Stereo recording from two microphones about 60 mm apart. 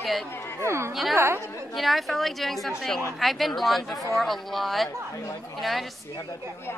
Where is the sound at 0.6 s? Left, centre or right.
Right.